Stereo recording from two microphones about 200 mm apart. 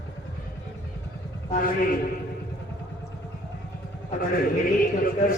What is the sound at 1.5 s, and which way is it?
Speech, 45° left (ahead or behind).